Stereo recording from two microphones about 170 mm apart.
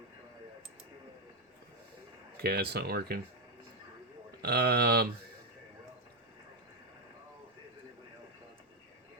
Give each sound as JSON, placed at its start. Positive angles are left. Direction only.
{"t": 2.4, "sound": "speech", "side_deg": -70}
{"t": 4.4, "sound": "speech", "side_deg": -70}